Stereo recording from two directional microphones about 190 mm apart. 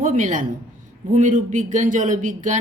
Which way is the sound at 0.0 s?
40° right (ahead or behind).